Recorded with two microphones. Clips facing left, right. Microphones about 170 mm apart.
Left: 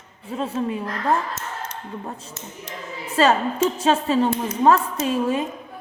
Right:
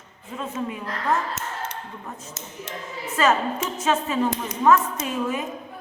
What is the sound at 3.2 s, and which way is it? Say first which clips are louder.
A woman's voice: left 4 dB; 30° left (ahead or behind).